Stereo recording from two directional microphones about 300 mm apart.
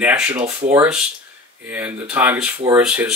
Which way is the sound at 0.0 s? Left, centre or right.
Centre.